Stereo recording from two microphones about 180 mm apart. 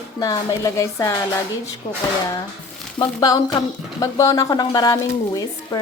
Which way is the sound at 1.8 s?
45° left (ahead or behind).